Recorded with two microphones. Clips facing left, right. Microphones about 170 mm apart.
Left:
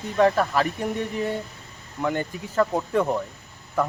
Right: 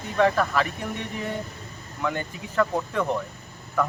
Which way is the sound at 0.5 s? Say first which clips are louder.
Left 3 dB; 40° left (ahead or behind).